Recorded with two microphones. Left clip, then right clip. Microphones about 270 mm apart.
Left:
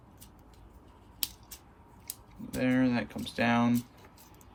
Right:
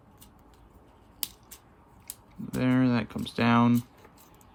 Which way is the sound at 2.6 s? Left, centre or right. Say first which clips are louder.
Right 2 dB; centre.